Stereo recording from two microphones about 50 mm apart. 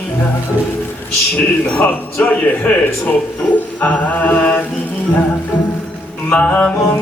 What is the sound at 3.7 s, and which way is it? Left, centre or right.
Music, left.